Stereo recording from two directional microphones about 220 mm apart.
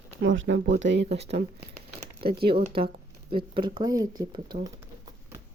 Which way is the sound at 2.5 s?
30° right (ahead or behind).